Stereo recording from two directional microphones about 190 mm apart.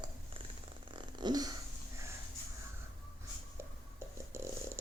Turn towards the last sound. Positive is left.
turn(degrees=-15)  # may be behind; listen again after turning